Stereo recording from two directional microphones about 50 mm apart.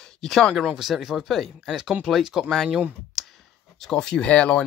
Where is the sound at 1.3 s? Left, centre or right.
Centre.